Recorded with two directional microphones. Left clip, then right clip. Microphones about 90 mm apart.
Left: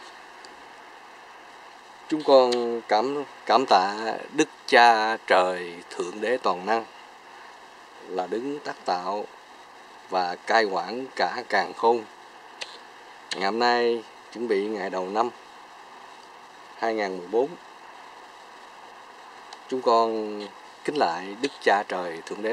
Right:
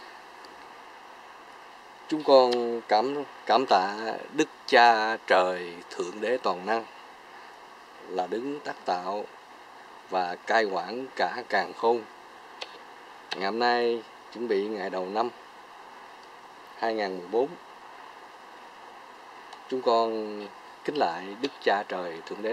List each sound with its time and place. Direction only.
2.2 s speech: 10° left (ahead or behind)
8.1 s speech: 15° left (ahead or behind)
13.4 s speech: 25° left (ahead or behind)
16.8 s speech: 15° left (ahead or behind)
19.7 s speech: 20° left (ahead or behind)